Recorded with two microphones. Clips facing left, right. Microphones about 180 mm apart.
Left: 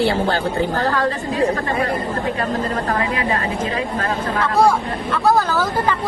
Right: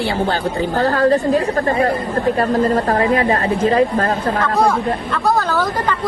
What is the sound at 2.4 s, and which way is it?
A woman's voice, 35° right (ahead or behind).